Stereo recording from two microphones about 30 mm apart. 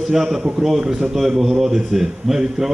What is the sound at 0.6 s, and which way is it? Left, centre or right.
Speech, right.